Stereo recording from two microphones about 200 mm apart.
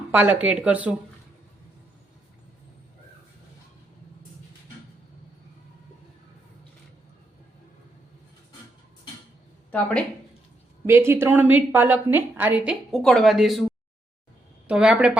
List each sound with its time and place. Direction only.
0.1 s a woman's voice: 10° right (ahead or behind)
10.8 s a woman's voice: 10° right (ahead or behind)
14.7 s speech: 5° right (ahead or behind)